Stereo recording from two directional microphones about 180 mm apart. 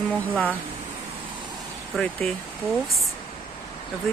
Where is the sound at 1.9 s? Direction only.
5° left (ahead or behind).